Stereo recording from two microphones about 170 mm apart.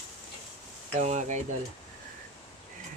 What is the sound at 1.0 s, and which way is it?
Speech, 45° right (ahead or behind).